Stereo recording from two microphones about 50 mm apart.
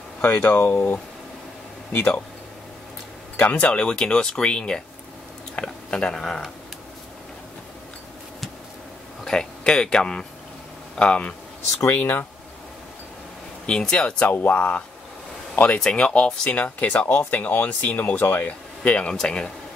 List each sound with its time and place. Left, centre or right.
0.2 s speech: left
0.5 s speech: left
3.4 s speech: left
9.2 s speech: centre
11.8 s speech: left
13.7 s speech: centre
14.3 s speech: left
15.8 s speech: centre; by 18.5 s left
18.9 s speech: left